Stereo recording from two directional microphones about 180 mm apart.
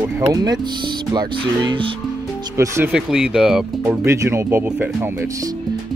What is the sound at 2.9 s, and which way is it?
Speech, 5° right (ahead or behind).